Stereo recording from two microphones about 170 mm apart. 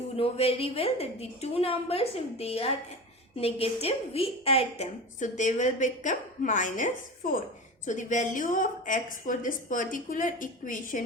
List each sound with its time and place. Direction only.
0.2 s a woman's voice: 35° left (ahead or behind); by 11.0 s 50° left (ahead or behind)